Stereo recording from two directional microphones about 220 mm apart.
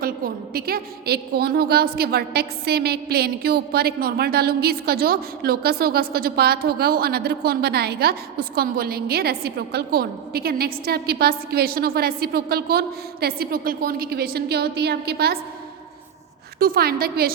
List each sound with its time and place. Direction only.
0.0 s a woman's voice: 40° right (ahead or behind)
16.6 s a woman's voice: 40° right (ahead or behind)